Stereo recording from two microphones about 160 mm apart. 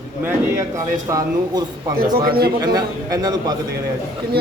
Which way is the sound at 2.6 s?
25° right (ahead or behind).